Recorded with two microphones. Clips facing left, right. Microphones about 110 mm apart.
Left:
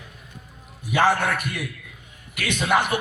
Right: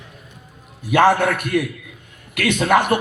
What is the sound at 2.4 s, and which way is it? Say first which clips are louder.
Speech: right 5 dB; 55° right (ahead or behind).